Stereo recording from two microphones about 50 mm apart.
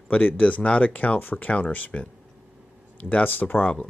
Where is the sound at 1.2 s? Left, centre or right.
Left.